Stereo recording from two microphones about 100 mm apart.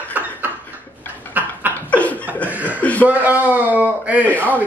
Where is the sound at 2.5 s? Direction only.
15° right (ahead or behind).